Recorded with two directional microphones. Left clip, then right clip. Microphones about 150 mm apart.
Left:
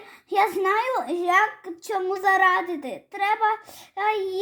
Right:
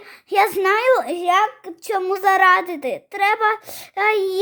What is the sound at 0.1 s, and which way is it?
A woman's voice, 45° right (ahead or behind).